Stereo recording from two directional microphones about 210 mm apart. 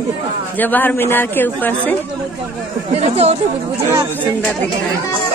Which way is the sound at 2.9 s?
30° right (ahead or behind).